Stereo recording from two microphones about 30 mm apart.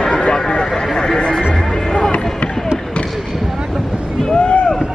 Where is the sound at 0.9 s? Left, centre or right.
Left.